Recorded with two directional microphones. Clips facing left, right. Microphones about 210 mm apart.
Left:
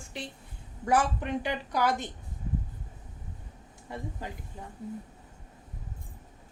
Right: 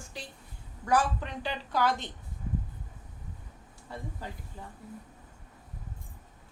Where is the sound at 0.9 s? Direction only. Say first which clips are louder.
Left 1 dB; 20° left (ahead or behind).